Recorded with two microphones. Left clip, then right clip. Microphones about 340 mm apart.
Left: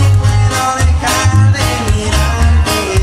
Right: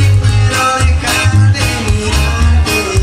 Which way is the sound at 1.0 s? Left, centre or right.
Left.